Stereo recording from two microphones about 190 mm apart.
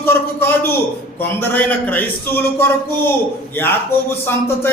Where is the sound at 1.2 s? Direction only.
10° left (ahead or behind).